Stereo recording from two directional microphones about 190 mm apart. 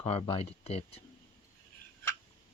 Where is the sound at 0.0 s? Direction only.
30° left (ahead or behind).